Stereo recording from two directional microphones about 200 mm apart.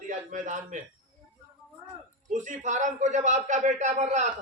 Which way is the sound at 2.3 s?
40° right (ahead or behind).